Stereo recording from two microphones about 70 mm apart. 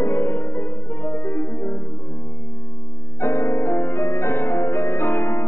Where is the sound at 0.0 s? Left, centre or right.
Left.